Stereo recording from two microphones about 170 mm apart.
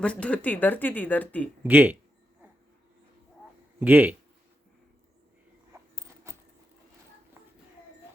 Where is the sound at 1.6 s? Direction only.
10° right (ahead or behind).